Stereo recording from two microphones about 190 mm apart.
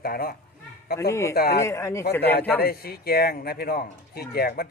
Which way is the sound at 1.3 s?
55° left (ahead or behind).